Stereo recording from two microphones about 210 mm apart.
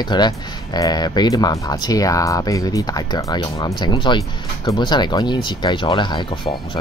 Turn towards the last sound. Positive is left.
turn(degrees=20)  # may be behind; listen again after turning